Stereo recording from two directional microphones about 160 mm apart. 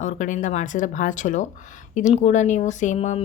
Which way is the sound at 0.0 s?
50° left (ahead or behind).